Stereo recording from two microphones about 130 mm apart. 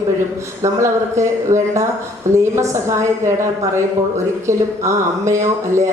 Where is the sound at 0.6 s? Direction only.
20° right (ahead or behind).